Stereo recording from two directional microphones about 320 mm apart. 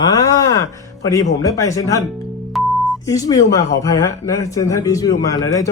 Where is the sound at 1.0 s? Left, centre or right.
Centre.